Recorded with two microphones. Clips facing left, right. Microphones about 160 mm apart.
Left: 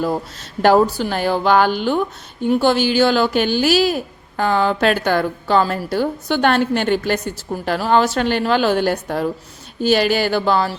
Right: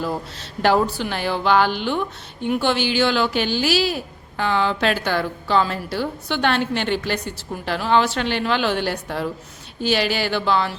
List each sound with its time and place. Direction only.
0.6 s speech: 45° left (ahead or behind)